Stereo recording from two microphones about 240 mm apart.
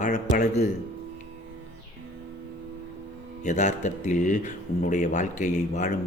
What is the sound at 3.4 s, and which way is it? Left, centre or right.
Speech, left.